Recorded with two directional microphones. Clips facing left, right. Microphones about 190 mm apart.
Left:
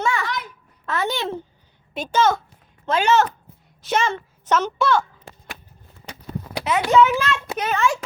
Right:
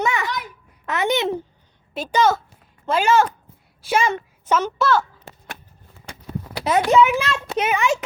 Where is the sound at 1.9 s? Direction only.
10° right (ahead or behind).